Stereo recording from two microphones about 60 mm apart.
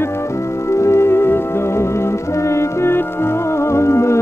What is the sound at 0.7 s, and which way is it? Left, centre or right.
Music, left.